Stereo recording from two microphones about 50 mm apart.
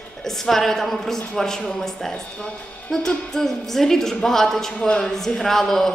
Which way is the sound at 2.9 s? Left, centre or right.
Centre.